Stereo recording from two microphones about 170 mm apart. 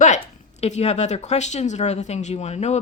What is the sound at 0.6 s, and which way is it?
A woman's voice, 40° left (ahead or behind).